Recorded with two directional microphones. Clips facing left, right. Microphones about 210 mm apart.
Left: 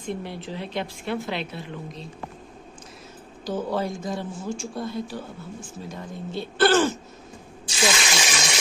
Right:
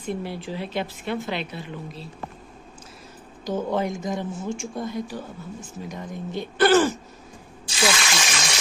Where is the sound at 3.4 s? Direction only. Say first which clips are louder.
Right 2 dB; 20° right (ahead or behind).